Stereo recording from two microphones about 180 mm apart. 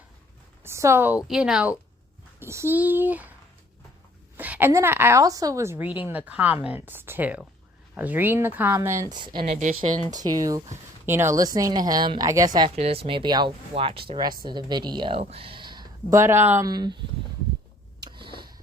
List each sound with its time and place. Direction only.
0.6 s a woman's voice: 15° right (ahead or behind)
4.4 s a woman's voice: 10° right (ahead or behind); by 9.4 s 25° right (ahead or behind)
9.5 s speech: 45° right (ahead or behind)
10.1 s speech: 20° right (ahead or behind)
12.7 s speech: 35° right (ahead or behind)
18.0 s a sound: 25° right (ahead or behind)